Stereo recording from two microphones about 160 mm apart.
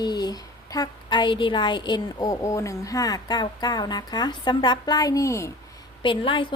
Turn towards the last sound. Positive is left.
turn(degrees=30)  # may be behind; listen again after turning